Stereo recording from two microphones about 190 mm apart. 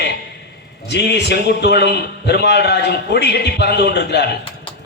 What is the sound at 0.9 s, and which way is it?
A man's voice, 60° left (ahead or behind).